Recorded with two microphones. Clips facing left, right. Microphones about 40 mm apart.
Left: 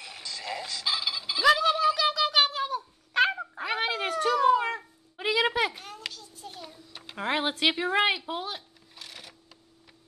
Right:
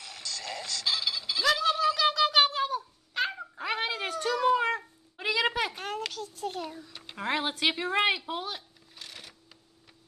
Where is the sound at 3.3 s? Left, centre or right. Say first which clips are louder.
Left 6 dB; left.